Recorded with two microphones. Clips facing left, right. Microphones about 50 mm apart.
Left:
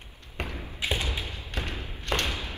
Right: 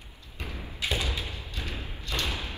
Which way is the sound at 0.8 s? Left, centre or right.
Left.